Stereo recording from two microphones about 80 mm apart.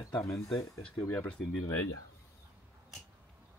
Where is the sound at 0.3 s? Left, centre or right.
Centre.